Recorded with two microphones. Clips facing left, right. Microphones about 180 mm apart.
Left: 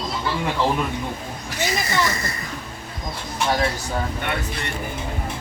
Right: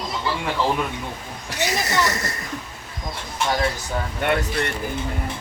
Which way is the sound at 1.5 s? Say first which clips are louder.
Right 1 dB; 80° right.